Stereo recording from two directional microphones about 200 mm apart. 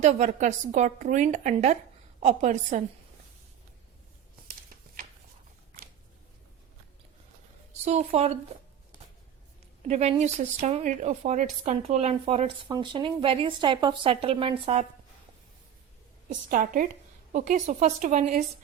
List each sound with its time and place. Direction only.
0.0 s speech: 35° right (ahead or behind)
7.7 s a woman's voice: 35° right (ahead or behind)
9.8 s a woman's voice: 35° right (ahead or behind)
16.3 s a woman's voice: 45° right (ahead or behind)